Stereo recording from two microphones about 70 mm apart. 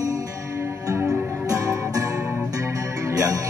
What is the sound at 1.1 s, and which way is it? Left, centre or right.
Music, right.